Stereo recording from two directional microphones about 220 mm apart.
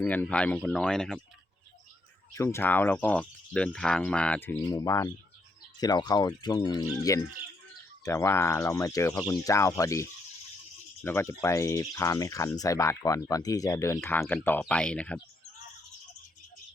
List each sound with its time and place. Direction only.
0.0 s speech: 5° left (ahead or behind)
2.3 s speech: 10° left (ahead or behind)